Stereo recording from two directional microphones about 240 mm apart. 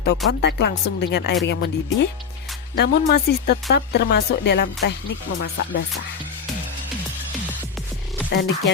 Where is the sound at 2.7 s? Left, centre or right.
Left.